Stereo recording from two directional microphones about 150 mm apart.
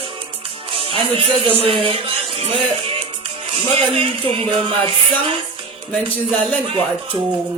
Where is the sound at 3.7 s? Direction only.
40° right (ahead or behind).